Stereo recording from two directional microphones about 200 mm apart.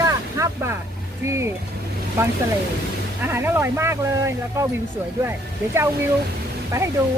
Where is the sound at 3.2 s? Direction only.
10° right (ahead or behind).